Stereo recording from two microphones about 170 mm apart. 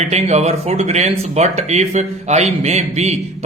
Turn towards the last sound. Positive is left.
turn(degrees=-40)  # may be behind; listen again after turning